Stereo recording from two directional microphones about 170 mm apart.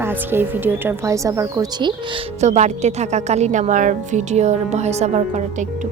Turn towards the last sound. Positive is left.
turn(degrees=-40)  # may be behind; listen again after turning